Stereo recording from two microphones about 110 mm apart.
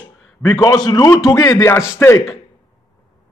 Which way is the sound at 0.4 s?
25° left (ahead or behind).